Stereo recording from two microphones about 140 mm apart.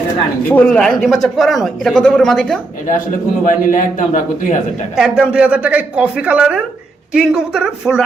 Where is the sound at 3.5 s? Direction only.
75° left (ahead or behind).